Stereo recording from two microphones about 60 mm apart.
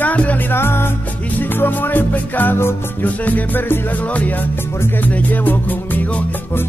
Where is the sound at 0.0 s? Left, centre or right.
Left.